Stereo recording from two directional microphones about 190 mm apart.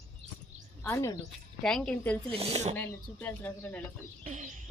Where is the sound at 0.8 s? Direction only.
15° left (ahead or behind).